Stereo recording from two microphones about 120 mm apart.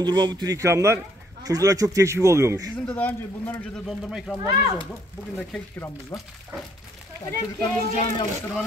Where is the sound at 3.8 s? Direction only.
Centre (ahead or behind).